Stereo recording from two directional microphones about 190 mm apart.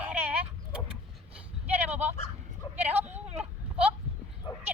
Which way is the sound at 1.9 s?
35° right (ahead or behind).